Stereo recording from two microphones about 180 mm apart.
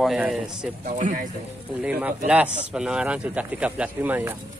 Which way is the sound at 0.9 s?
45° right (ahead or behind).